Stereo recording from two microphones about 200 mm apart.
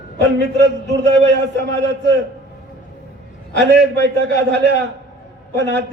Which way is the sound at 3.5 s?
60° right (ahead or behind).